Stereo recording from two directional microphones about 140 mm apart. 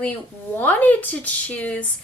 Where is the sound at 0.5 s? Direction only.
10° left (ahead or behind).